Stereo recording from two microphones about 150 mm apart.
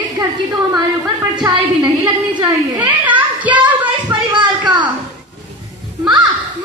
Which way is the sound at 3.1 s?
10° right (ahead or behind).